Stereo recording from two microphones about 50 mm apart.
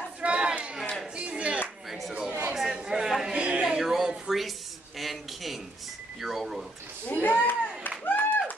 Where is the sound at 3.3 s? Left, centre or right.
Right.